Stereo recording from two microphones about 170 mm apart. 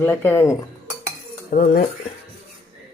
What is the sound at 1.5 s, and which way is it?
Speech, 60° left (ahead or behind).